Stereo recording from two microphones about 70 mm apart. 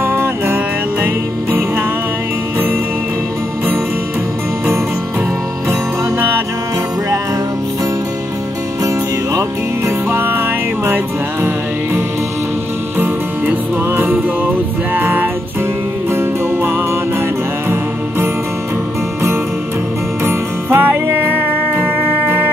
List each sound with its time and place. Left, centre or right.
0.0 s music: right
5.7 s music: right
10.1 s music: right
12.9 s music: right
20.2 s music: right